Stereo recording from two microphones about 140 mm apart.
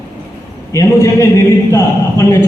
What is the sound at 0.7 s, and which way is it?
A man's voice, 20° left (ahead or behind).